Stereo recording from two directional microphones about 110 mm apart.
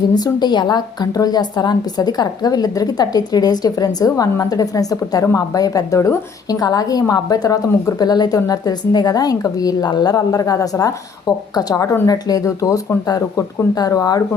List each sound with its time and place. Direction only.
0.1 s a woman's voice: 40° left (ahead or behind)